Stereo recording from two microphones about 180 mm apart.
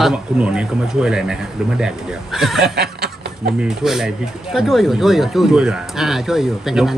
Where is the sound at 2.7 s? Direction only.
60° right (ahead or behind).